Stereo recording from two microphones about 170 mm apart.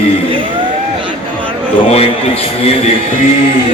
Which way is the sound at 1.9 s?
35° left (ahead or behind).